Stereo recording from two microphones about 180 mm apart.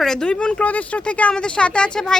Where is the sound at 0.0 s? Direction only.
5° left (ahead or behind).